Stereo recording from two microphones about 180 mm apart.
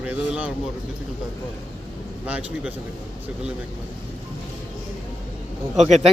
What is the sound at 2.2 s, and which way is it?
Speech, 5° right (ahead or behind).